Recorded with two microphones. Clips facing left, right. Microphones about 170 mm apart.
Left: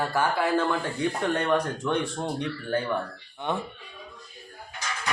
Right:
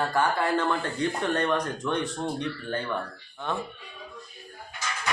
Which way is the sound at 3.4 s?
20° left (ahead or behind).